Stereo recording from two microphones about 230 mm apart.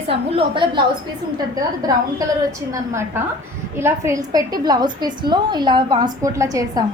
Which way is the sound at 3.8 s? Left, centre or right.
Centre.